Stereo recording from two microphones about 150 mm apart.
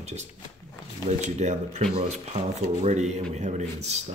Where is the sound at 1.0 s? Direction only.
50° right (ahead or behind).